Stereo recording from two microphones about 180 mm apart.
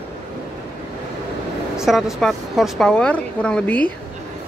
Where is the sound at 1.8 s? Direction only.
Centre (ahead or behind).